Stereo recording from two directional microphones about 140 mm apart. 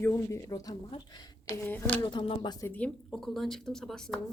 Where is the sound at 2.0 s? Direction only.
35° left (ahead or behind).